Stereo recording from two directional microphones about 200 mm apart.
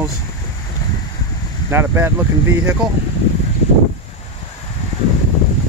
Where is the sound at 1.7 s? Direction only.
10° right (ahead or behind).